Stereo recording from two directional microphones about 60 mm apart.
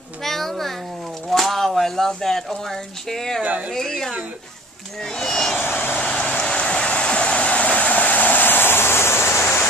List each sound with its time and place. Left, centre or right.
0.2 s a sound: centre
1.3 s speech: centre
3.4 s speech: right
3.7 s speech: centre
5.6 s vehicle: left
5.9 s vehicle: left